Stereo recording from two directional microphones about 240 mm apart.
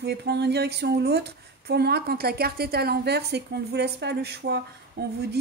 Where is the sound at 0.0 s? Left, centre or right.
Right.